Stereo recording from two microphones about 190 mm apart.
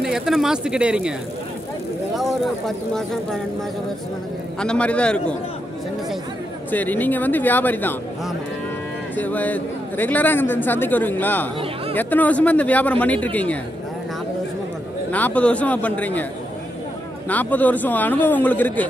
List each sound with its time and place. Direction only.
0.0 s speech: centre (ahead or behind)
2.1 s speech: centre (ahead or behind)
4.6 s speech: 5° left (ahead or behind)
6.7 s a man's voice: 10° left (ahead or behind)
9.1 s a man's voice: 10° left (ahead or behind)
15.0 s a man's voice: 10° left (ahead or behind)
17.3 s a man's voice: 10° left (ahead or behind)